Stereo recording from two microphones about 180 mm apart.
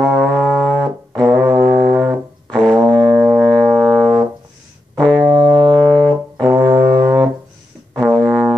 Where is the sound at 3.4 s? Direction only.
5° left (ahead or behind).